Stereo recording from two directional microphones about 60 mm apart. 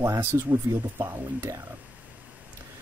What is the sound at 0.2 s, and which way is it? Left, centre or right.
Speech, right.